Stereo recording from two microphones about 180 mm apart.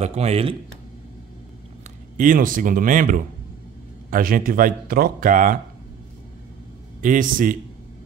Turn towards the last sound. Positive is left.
turn(degrees=-50)  # may be behind; listen again after turning